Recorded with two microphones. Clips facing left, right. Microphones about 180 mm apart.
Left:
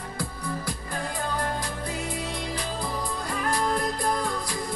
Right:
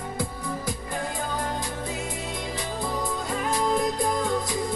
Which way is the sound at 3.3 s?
20° right (ahead or behind).